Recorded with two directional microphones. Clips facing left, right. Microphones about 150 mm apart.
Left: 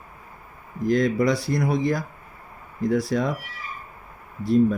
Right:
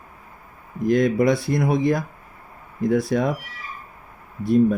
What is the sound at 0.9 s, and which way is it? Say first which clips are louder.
Speech: right 3 dB; 55° right (ahead or behind).